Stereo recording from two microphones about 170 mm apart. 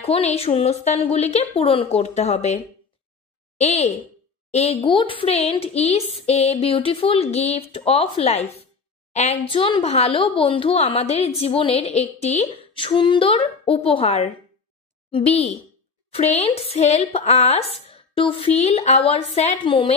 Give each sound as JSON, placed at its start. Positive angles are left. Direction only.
{"t": 0.0, "sound": "a woman's voice", "side_deg": 35}